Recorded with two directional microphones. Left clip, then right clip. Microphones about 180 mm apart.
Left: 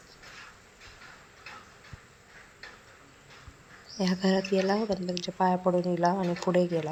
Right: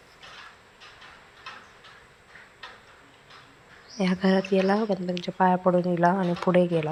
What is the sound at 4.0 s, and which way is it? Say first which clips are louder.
Speech: right 3 dB; centre (ahead or behind).